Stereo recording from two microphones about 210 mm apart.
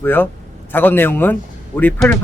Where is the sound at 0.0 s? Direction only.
10° left (ahead or behind).